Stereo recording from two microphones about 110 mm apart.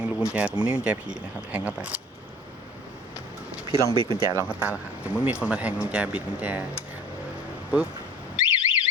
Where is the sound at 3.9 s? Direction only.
50° right (ahead or behind).